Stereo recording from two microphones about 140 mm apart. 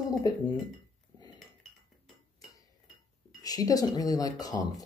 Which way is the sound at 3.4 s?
25° left (ahead or behind).